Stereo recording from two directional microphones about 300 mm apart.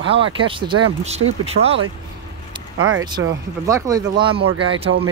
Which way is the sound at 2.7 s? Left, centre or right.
Right.